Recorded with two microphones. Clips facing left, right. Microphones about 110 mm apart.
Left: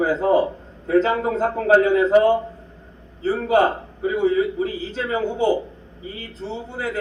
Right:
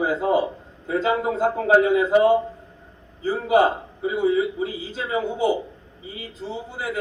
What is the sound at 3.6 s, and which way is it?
A man's voice, 25° right (ahead or behind).